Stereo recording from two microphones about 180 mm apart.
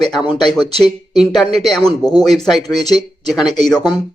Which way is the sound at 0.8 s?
Centre (ahead or behind).